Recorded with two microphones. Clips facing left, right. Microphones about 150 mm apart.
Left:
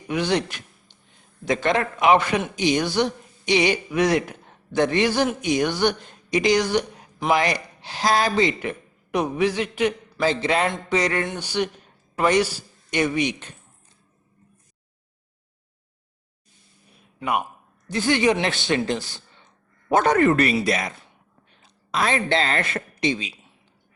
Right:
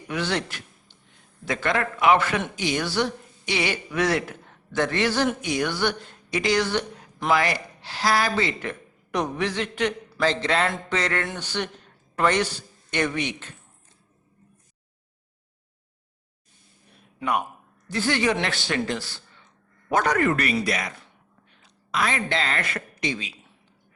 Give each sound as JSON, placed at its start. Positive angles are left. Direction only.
{"t": 0.1, "sound": "a man's voice", "side_deg": 15}
{"t": 17.8, "sound": "a man's voice", "side_deg": 20}